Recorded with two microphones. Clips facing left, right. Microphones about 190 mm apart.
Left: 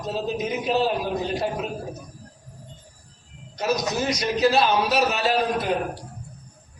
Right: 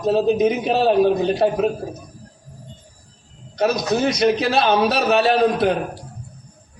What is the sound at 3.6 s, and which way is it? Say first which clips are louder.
A man's voice: right 5 dB; 60° right (ahead or behind).